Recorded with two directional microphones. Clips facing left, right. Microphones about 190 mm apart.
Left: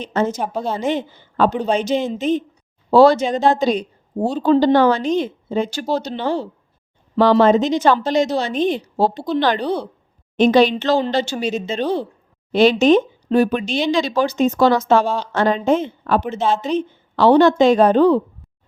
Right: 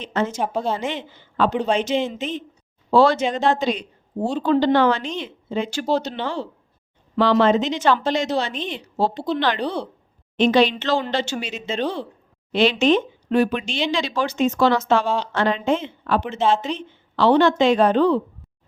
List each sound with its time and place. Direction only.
0.0 s a woman's voice: 40° left (ahead or behind)
0.3 s a woman's voice: centre (ahead or behind)
0.8 s a woman's voice: 40° left (ahead or behind)
9.6 s speech: 10° left (ahead or behind)
10.3 s a woman's voice: 40° left (ahead or behind)